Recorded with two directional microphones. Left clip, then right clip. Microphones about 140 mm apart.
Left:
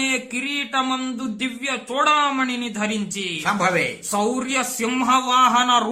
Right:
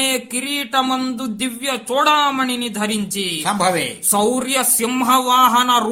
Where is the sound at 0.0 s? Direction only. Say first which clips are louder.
Right 2 dB; 40° right (ahead or behind).